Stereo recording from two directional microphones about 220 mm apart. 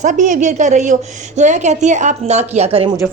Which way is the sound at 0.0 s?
35° right (ahead or behind).